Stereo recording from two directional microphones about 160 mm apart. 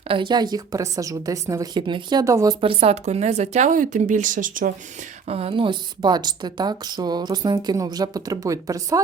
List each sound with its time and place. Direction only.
0.1 s a woman's voice: 30° right (ahead or behind)
2.6 s speech: 35° right (ahead or behind); by 4.7 s 55° right (ahead or behind)
5.3 s a woman's voice: 35° right (ahead or behind); by 9.0 s 20° right (ahead or behind)